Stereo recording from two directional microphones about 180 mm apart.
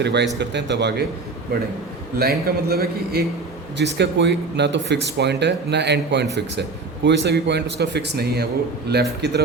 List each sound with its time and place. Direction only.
0.0 s a man's voice: 70° right (ahead or behind)
2.1 s a man's voice: 60° right (ahead or behind)
3.8 s a man's voice: 75° right (ahead or behind)